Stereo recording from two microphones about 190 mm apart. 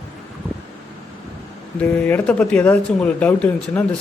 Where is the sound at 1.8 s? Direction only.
5° left (ahead or behind).